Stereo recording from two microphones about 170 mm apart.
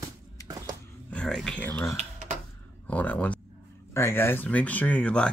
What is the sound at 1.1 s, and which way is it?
Speech, 5° left (ahead or behind).